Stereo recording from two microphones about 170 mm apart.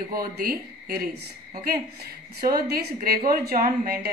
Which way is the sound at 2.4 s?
60° right (ahead or behind).